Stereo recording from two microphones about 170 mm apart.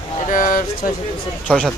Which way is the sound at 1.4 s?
5° left (ahead or behind).